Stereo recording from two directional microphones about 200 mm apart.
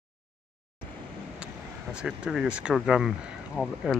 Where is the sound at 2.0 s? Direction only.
5° right (ahead or behind).